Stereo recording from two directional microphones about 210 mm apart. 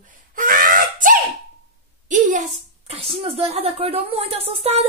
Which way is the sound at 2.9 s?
25° right (ahead or behind).